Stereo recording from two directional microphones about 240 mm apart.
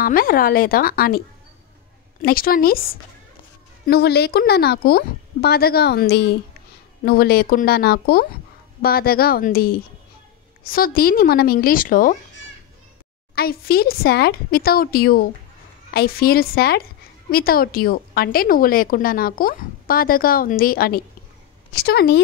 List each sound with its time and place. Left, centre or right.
0.0 s a woman's voice: left
2.2 s a woman's voice: left
13.3 s a woman's voice: left